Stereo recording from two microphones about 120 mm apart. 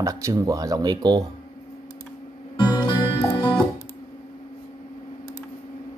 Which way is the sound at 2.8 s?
40° left (ahead or behind).